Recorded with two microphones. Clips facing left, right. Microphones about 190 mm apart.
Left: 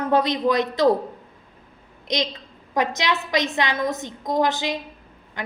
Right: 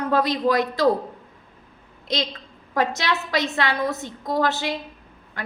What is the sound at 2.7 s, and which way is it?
A woman's voice, 20° left (ahead or behind).